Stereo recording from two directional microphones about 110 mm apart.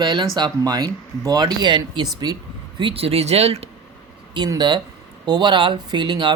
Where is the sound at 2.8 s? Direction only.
55° right (ahead or behind).